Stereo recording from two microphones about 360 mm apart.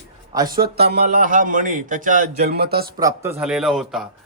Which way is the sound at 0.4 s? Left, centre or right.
Right.